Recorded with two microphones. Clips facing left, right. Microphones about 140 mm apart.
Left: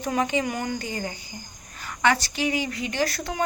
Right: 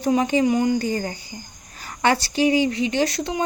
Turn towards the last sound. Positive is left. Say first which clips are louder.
# right 5 dB
turn(degrees=-25)  # may be behind; listen again after turning